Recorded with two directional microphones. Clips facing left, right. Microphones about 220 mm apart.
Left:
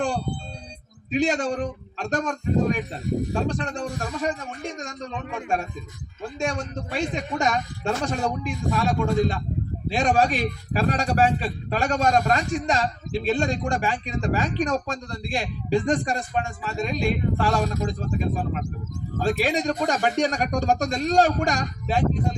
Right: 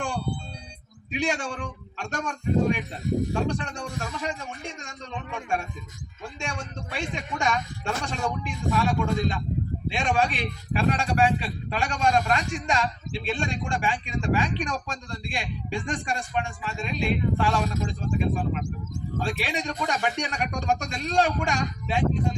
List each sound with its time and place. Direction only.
1.1 s a man's voice: 40° left (ahead or behind)
4.2 s a man's voice: 35° left (ahead or behind)